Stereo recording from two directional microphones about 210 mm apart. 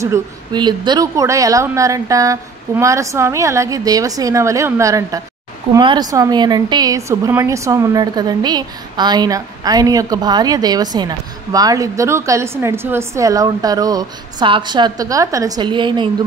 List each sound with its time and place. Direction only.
0.0 s a woman's voice: 15° right (ahead or behind)